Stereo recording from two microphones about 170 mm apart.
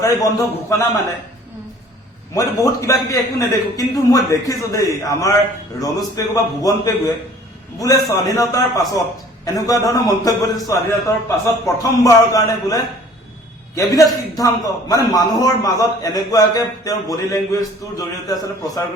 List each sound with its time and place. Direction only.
0.0 s a man's voice: 20° left (ahead or behind)
2.3 s a man's voice: 20° left (ahead or behind)